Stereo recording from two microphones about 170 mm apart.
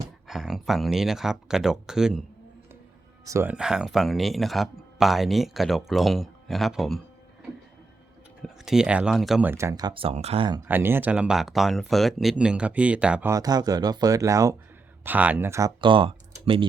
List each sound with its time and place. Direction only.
0.3 s speech: centre (ahead or behind)
3.2 s speech: 15° right (ahead or behind)
3.5 s speech: 5° right (ahead or behind)
8.4 s speech: centre (ahead or behind)
9.5 s speech: 15° right (ahead or behind)
10.7 s speech: 10° right (ahead or behind)
13.3 s speech: 20° right (ahead or behind)
15.8 s speech: 30° right (ahead or behind)